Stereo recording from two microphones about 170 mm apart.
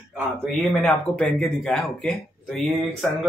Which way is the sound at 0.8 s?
5° left (ahead or behind).